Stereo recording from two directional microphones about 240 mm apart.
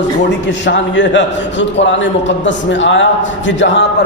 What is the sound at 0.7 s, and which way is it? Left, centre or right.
Speech, left.